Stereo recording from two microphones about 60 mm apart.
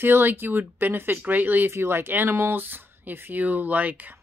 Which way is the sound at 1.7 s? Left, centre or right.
Right.